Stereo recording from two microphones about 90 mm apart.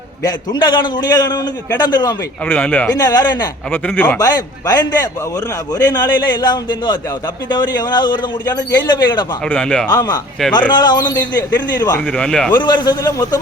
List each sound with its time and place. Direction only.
0.5 s a man's voice: 55° left (ahead or behind)
2.5 s speech: 15° left (ahead or behind)
2.9 s a man's voice: 45° left (ahead or behind)
3.7 s speech: 20° left (ahead or behind)
4.2 s a man's voice: 45° left (ahead or behind)
9.5 s speech: 10° left (ahead or behind)
9.9 s speech: 40° left (ahead or behind)
10.8 s a man's voice: 55° left (ahead or behind)
12.0 s speech: 10° left (ahead or behind)
12.5 s a man's voice: 55° left (ahead or behind)